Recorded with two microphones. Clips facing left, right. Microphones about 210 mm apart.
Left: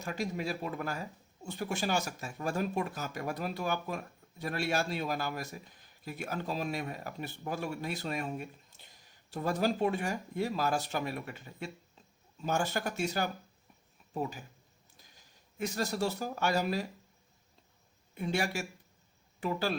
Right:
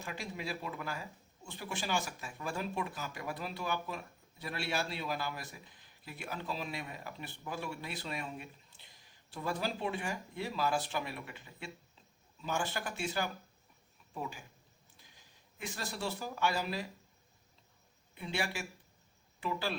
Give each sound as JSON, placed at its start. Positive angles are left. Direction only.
{"t": 0.0, "sound": "speech", "side_deg": 40}
{"t": 18.1, "sound": "speech", "side_deg": 45}